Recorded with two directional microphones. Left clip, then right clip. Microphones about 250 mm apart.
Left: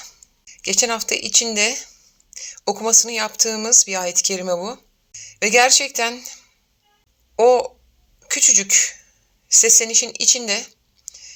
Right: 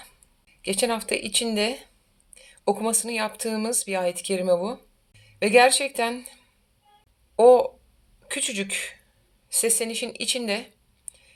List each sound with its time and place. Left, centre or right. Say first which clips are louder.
0.8 s a woman's voice: left 5 dB; centre
11.1 s whispering: left 15 dB; centre